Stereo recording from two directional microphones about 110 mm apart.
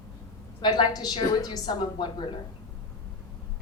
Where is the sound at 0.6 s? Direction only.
40° left (ahead or behind).